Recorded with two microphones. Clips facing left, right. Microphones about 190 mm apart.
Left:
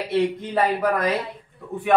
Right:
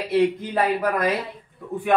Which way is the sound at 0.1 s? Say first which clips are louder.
Right 2 dB; 5° right (ahead or behind).